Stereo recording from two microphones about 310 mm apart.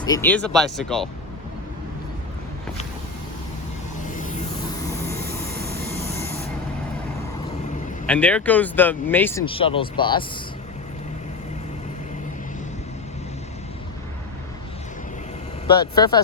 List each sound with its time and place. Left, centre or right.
0.0 s speech: centre
4.0 s vehicle: left
6.0 s spray: centre
8.0 s speech: centre
9.5 s speech: centre
15.6 s speech: centre